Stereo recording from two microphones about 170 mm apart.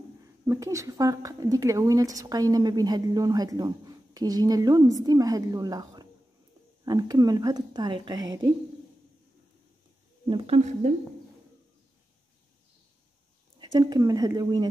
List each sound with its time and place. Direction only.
0.5 s a woman's voice: 15° right (ahead or behind)
10.2 s speech: 30° right (ahead or behind)
13.6 s a woman's voice: 25° right (ahead or behind)